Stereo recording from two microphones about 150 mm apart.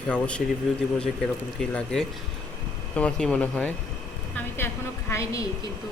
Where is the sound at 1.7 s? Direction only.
5° left (ahead or behind).